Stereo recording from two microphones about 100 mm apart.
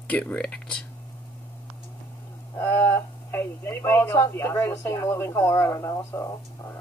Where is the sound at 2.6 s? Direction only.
20° left (ahead or behind).